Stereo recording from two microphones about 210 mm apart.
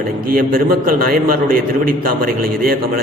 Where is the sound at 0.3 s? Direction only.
45° right (ahead or behind).